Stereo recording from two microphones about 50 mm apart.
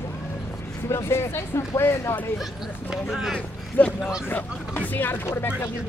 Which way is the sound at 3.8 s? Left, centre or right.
Left.